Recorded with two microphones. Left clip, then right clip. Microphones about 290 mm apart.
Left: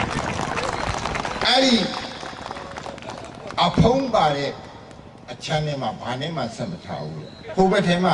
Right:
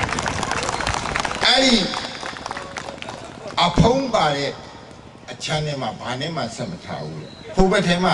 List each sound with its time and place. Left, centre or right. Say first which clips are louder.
0.1 s a sound: right 2 dB; centre
3.5 s a man's voice: right 1 dB; centre
7.7 s a man's voice: right 1 dB; centre